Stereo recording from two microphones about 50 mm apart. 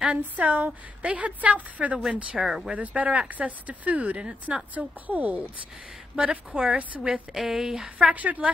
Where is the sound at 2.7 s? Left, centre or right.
Right.